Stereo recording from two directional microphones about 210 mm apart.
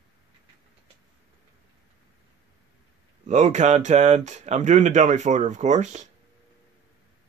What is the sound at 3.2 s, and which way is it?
Speech, 35° right (ahead or behind).